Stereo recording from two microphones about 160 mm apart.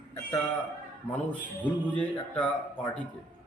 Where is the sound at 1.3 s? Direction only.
10° left (ahead or behind).